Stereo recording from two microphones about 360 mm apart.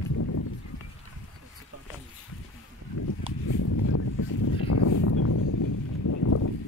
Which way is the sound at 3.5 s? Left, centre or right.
Left.